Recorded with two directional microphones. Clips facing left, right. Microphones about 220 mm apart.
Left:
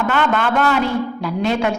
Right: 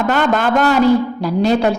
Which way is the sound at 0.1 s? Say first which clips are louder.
Right 4 dB; 40° right (ahead or behind).